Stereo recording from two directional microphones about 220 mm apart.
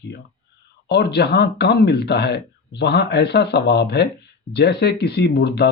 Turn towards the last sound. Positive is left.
turn(degrees=50)  # may be behind; listen again after turning